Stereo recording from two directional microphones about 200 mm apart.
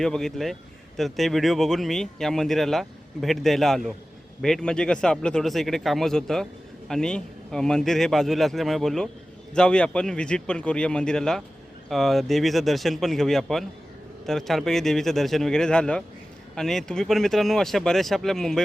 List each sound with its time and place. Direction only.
0.0 s a man's voice: centre (ahead or behind)